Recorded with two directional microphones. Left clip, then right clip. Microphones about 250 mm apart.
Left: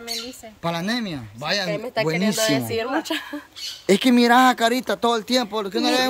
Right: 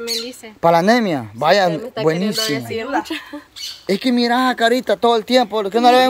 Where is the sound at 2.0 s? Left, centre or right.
Centre.